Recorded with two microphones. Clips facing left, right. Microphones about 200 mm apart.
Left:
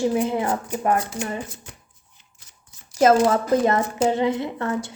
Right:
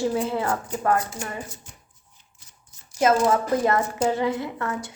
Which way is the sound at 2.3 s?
80° left.